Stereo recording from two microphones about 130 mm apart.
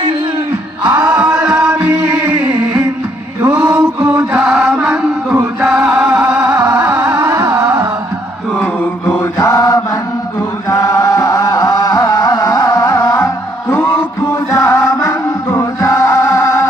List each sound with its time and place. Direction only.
0.9 s a sound: 30° right (ahead or behind)
1.1 s music: 5° right (ahead or behind)
1.8 s chant: 20° right (ahead or behind)
3.5 s chant: 10° right (ahead or behind)
5.5 s music: 5° right (ahead or behind)
5.8 s music: 20° right (ahead or behind)
6.1 s music: 5° right (ahead or behind)
6.4 s music: 30° right (ahead or behind)
8.6 s mantra: 15° left (ahead or behind)
9.4 s mantra: 30° left (ahead or behind)
10.7 s music: 25° left (ahead or behind)
15.4 s chant: 25° left (ahead or behind)